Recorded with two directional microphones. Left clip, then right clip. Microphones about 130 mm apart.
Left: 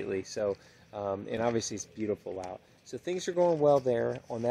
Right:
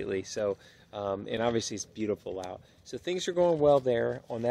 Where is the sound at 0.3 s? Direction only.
35° right (ahead or behind).